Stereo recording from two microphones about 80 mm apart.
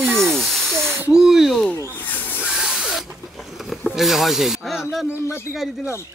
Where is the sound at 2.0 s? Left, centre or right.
Left.